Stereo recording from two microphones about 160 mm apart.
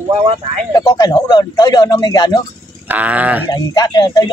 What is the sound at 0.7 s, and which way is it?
Speech, 20° left (ahead or behind).